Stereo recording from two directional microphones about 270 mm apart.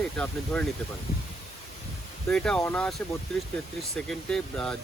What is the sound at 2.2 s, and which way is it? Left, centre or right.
Speech, centre.